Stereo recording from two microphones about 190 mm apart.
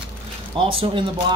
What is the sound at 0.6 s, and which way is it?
Speech, 30° right (ahead or behind).